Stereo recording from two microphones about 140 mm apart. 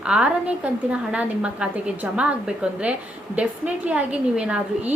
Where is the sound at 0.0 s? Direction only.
5° right (ahead or behind).